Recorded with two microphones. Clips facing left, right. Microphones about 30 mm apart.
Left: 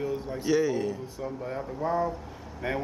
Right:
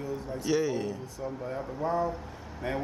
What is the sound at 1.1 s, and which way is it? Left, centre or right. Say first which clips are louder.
Speech: left 1 dB; centre.